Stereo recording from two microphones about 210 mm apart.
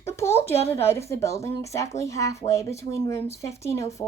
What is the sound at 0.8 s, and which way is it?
A woman's voice, 10° left (ahead or behind).